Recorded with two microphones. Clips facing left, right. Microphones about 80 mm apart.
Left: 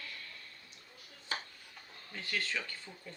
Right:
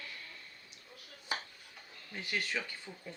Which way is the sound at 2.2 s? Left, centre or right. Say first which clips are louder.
Right 1 dB; centre.